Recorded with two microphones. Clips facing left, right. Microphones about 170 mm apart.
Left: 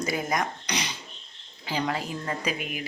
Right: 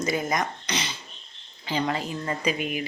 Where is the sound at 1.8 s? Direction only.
Centre (ahead or behind).